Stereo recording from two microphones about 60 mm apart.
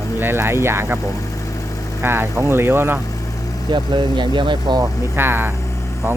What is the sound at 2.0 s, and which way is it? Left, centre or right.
Speech, right.